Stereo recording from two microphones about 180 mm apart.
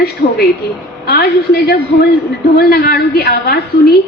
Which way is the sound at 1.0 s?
60° left (ahead or behind).